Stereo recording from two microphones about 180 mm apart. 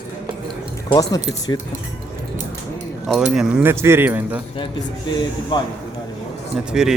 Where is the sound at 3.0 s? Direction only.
Centre (ahead or behind).